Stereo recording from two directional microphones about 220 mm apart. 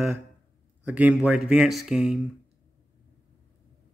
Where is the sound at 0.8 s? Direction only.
5° right (ahead or behind).